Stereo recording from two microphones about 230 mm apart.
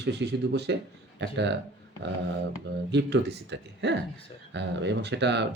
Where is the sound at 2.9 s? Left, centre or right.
Right.